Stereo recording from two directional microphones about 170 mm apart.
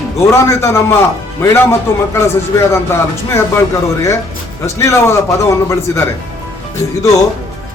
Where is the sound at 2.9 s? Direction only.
15° left (ahead or behind).